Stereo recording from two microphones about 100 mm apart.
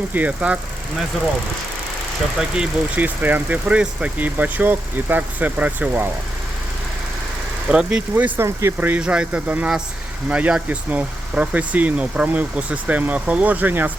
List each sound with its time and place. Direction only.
0.1 s speech: 15° right (ahead or behind)
2.4 s speech: 10° right (ahead or behind)
7.7 s speech: 10° right (ahead or behind)